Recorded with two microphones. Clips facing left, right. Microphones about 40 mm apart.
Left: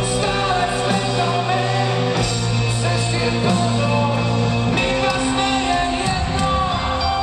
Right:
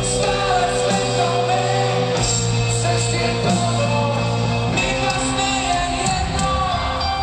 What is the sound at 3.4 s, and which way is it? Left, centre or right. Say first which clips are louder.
Music: left 1 dB; centre.